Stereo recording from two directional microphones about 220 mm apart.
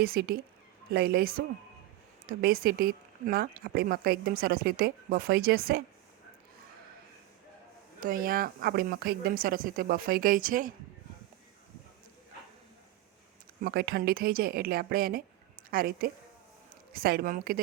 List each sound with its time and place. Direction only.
0.0 s speech: 45° right (ahead or behind)
8.0 s a woman's voice: 40° right (ahead or behind)
13.6 s a woman's voice: 45° right (ahead or behind)